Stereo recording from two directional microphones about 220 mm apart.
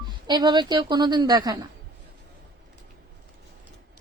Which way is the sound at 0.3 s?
20° right (ahead or behind).